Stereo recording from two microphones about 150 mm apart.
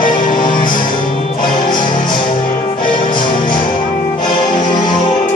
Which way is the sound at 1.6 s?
30° left (ahead or behind).